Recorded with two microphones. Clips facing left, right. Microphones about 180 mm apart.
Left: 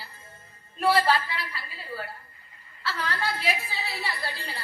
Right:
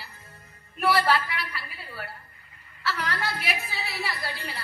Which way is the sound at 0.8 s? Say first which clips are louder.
Left 1 dB; 30° left (ahead or behind).